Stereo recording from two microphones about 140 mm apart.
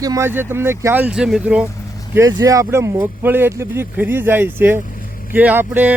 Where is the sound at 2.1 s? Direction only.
25° right (ahead or behind).